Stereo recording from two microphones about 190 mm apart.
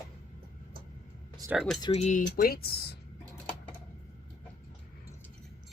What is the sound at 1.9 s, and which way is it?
Speech, 40° left (ahead or behind).